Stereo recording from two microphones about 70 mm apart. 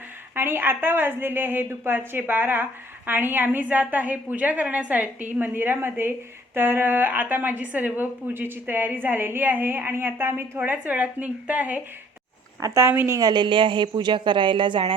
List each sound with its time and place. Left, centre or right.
0.3 s a woman's voice: right
10.6 s a woman's voice: right
12.6 s speech: right
12.9 s a woman's voice: right
13.1 s speech: right
13.9 s speech: right